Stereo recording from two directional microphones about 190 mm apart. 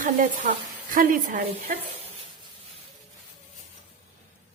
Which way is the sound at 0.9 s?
45° right (ahead or behind).